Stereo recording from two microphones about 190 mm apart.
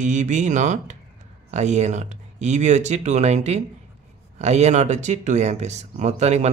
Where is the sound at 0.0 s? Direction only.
40° right (ahead or behind).